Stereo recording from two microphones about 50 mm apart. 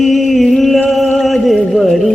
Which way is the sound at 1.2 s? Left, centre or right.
Centre.